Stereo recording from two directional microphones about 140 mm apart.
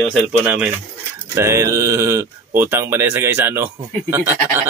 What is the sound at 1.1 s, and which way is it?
Speech, 20° right (ahead or behind).